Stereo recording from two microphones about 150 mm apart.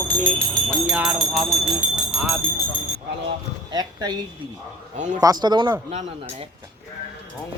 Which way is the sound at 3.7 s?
25° right (ahead or behind).